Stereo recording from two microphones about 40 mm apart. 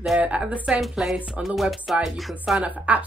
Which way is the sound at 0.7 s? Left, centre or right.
Centre.